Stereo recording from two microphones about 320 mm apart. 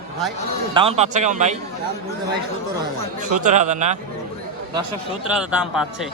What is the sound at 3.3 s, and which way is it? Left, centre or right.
Speech, right.